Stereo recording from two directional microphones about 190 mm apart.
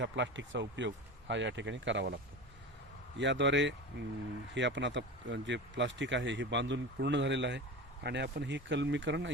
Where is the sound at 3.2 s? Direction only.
70° right (ahead or behind).